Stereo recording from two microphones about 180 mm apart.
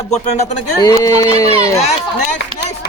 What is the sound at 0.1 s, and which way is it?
Speech, 40° left (ahead or behind).